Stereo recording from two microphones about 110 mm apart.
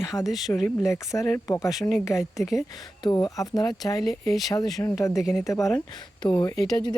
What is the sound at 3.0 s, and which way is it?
Speech, 40° left (ahead or behind).